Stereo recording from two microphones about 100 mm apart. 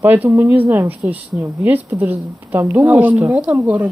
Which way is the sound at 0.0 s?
20° right (ahead or behind).